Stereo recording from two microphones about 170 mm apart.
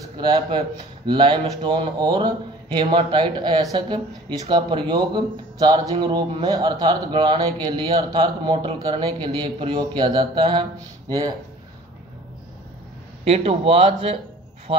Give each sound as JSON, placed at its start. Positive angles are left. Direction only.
{"t": 0.2, "sound": "speech", "side_deg": -25}
{"t": 13.2, "sound": "speech", "side_deg": -35}
{"t": 14.7, "sound": "a sound", "side_deg": -35}